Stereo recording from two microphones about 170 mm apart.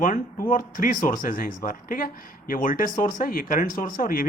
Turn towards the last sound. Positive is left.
turn(degrees=55)  # may be behind; listen again after turning